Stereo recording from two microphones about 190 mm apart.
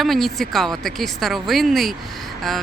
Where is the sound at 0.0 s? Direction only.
Centre (ahead or behind).